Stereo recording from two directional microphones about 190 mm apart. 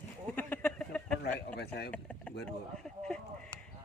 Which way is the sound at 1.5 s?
60° left (ahead or behind).